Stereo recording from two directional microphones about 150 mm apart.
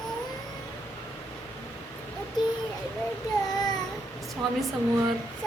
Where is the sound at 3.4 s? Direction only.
25° left (ahead or behind).